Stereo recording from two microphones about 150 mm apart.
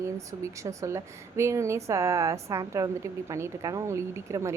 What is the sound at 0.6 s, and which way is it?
A woman's voice, 20° right (ahead or behind).